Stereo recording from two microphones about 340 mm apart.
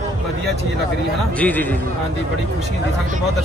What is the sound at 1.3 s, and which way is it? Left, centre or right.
Speech, centre.